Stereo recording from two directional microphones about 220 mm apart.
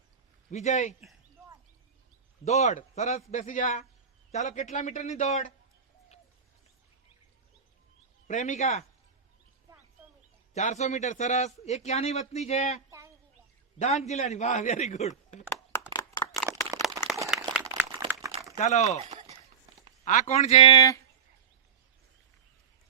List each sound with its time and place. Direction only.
0.5 s a man's voice: 30° left (ahead or behind)
2.4 s a man's voice: 30° left (ahead or behind)
8.3 s a man's voice: 35° left (ahead or behind)
10.5 s a man's voice: 30° left (ahead or behind)
15.9 s a sound: 15° left (ahead or behind)
17.1 s a sound: centre (ahead or behind)
17.5 s crumpling: 10° right (ahead or behind)
18.5 s speech: 30° left (ahead or behind)
19.0 s a sound: 30° right (ahead or behind)
20.1 s a man's voice: 35° left (ahead or behind); by 21.0 s 15° left (ahead or behind)